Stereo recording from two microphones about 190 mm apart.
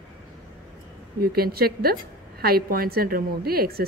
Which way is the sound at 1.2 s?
55° right (ahead or behind).